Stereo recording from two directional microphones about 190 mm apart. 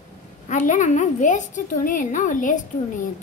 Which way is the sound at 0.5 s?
40° left (ahead or behind).